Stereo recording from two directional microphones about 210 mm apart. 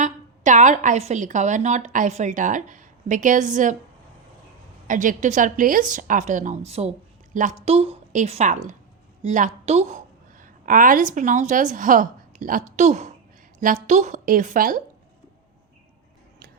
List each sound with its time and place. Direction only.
0.0 s a woman's voice: 35° right (ahead or behind)
4.9 s a woman's voice: 40° right (ahead or behind)